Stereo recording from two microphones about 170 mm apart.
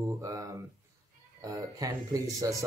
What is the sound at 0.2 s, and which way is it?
Speech, 20° right (ahead or behind).